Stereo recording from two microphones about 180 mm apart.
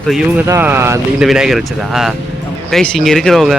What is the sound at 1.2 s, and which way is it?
Speech, 5° right (ahead or behind).